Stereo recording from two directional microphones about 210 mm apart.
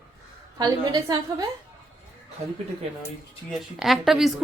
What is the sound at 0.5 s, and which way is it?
Speech, 20° right (ahead or behind).